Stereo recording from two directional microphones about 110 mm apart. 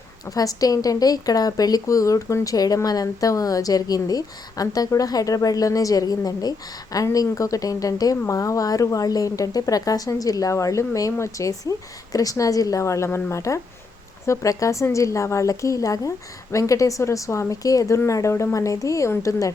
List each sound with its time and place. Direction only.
0.3 s a woman's voice: 35° left (ahead or behind)